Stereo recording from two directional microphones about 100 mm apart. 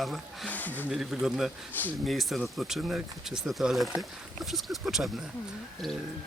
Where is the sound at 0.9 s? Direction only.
5° right (ahead or behind).